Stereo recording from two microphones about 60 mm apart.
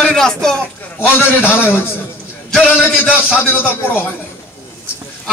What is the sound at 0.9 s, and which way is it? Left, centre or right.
Speech, left.